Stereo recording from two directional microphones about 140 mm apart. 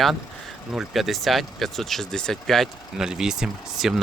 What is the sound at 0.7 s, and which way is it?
Speech, centre (ahead or behind).